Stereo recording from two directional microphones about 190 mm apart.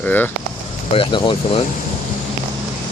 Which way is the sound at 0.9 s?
25° left (ahead or behind).